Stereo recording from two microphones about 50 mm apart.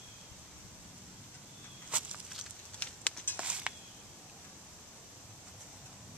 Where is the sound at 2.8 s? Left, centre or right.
Left.